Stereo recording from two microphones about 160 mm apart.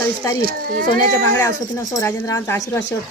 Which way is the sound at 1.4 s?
20° left (ahead or behind).